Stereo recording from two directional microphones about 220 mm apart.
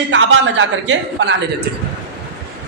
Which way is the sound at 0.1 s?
60° right (ahead or behind).